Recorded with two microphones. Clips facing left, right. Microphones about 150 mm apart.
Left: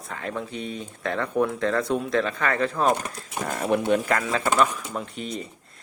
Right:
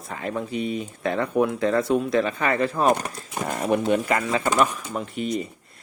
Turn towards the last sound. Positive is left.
turn(degrees=-5)  # may be behind; listen again after turning